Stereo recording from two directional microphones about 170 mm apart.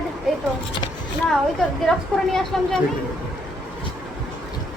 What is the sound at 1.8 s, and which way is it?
Speech, centre (ahead or behind).